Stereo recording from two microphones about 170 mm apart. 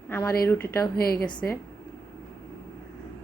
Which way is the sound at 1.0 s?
65° left (ahead or behind).